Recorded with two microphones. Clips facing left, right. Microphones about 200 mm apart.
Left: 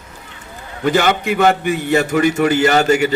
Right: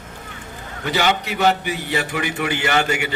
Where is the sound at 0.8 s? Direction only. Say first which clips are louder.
Left 5 dB; 50° left (ahead or behind).